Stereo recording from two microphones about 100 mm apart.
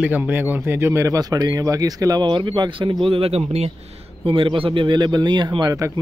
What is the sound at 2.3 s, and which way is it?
Speech, 55° right (ahead or behind).